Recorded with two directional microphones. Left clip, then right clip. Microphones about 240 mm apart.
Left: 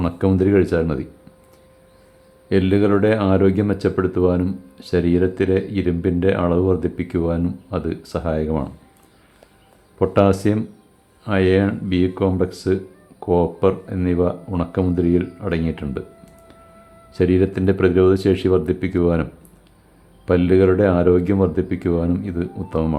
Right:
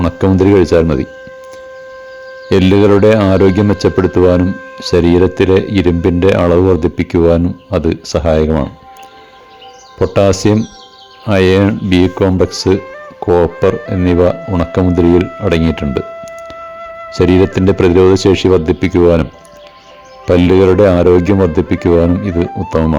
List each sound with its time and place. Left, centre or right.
0.0 s a man's voice: right
2.5 s speech: right
10.0 s a man's voice: right
17.2 s a man's voice: right